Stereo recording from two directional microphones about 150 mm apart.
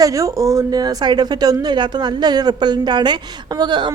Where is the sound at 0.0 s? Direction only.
20° right (ahead or behind).